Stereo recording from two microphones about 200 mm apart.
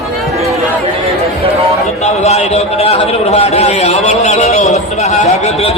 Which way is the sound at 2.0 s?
30° left (ahead or behind).